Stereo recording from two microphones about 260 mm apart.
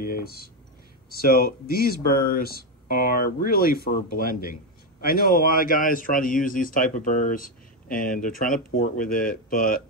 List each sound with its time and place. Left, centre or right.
0.0 s speech: left